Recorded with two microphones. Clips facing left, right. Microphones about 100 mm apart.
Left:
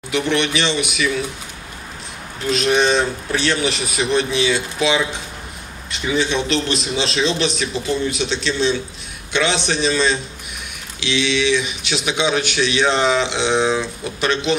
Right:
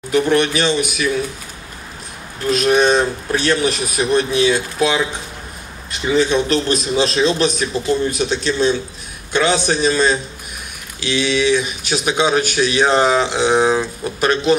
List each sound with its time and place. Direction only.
0.1 s a man's voice: 40° right (ahead or behind)
2.5 s a man's voice: 45° right (ahead or behind)